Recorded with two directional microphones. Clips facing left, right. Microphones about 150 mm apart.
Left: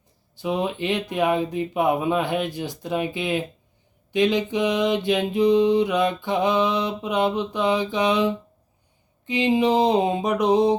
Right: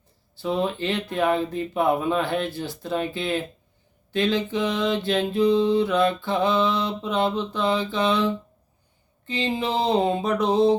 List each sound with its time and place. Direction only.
0.3 s mantra: 15° left (ahead or behind)